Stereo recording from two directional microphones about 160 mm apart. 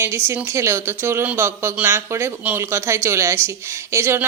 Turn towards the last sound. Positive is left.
turn(degrees=-15)  # may be behind; listen again after turning